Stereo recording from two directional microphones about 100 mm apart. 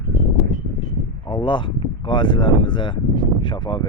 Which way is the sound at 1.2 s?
50° left (ahead or behind).